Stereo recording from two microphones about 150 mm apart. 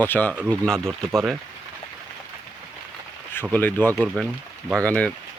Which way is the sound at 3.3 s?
15° left (ahead or behind).